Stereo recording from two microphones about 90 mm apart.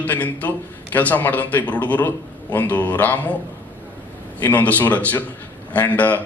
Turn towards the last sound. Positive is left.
turn(degrees=20)  # may be behind; listen again after turning